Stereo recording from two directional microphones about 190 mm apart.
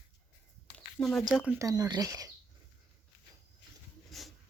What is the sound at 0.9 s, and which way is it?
Speech, 5° left (ahead or behind).